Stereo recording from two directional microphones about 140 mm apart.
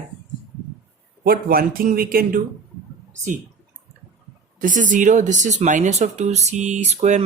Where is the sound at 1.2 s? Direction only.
90° right.